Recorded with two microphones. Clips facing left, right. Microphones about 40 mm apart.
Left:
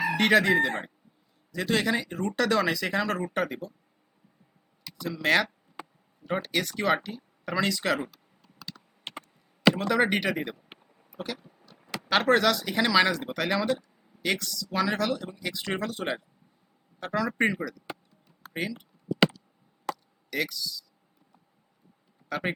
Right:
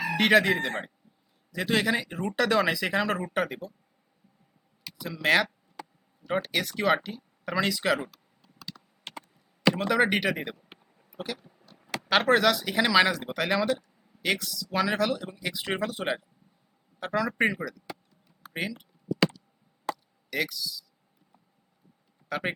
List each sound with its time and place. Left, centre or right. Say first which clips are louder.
0.2 s speech: even; centre
4.9 s speech: even; centre
8.7 s computer keyboard: even; centre
9.7 s speech: right 1 dB; centre
11.1 s a sound: even; left
12.0 s speech: even; centre
20.3 s speech: even; centre
22.3 s a man's voice: even; centre